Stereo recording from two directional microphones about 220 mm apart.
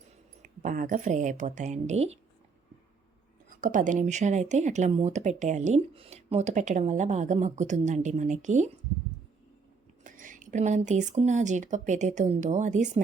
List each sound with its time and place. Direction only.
0.4 s speech: 35° right (ahead or behind)
3.6 s speech: 35° right (ahead or behind)
10.0 s speech: 35° right (ahead or behind)